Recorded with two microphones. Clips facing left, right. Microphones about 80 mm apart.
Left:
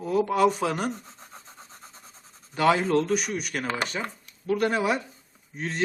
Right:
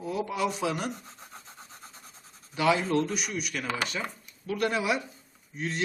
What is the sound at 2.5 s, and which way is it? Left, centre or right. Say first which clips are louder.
A man's voice: left 3 dB; left.